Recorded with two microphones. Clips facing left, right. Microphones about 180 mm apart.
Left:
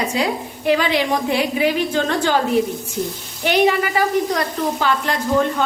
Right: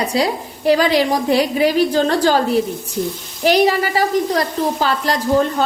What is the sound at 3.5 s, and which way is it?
A woman's voice, 35° right (ahead or behind).